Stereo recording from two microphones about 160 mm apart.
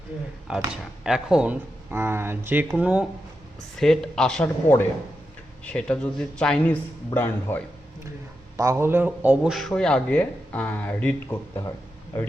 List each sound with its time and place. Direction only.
0.5 s speech: 5° right (ahead or behind)
3.8 s speech: 5° left (ahead or behind)
5.6 s speech: 5° left (ahead or behind)
8.5 s speech: 15° right (ahead or behind); by 11.7 s 20° left (ahead or behind)